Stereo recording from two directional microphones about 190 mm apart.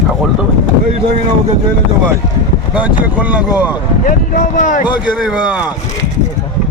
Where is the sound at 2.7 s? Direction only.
5° right (ahead or behind).